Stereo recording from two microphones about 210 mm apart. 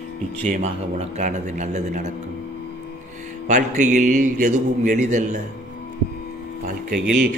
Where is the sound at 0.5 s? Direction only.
35° right (ahead or behind).